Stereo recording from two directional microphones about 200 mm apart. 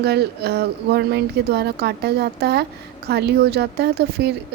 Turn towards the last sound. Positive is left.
turn(degrees=-55)  # may be behind; listen again after turning